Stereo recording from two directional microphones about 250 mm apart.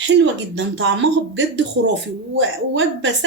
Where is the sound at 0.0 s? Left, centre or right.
Right.